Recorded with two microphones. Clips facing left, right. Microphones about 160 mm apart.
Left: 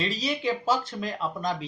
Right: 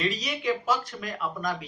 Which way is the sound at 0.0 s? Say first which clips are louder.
Left 1 dB; 30° left (ahead or behind).